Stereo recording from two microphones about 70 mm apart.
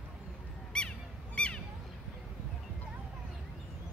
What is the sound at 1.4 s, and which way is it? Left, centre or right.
Honk, centre.